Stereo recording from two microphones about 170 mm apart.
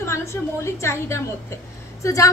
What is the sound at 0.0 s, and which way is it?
A woman's voice, 15° left (ahead or behind).